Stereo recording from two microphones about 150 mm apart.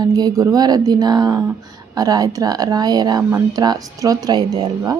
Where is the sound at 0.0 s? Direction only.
25° right (ahead or behind).